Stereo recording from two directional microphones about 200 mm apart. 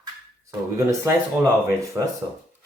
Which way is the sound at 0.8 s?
15° right (ahead or behind).